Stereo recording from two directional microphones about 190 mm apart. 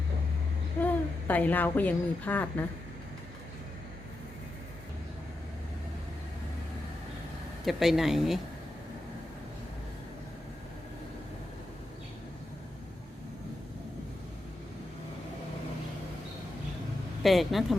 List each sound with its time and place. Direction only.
0.8 s a woman's voice: 10° left (ahead or behind)
7.6 s speech: centre (ahead or behind)
17.2 s speech: centre (ahead or behind)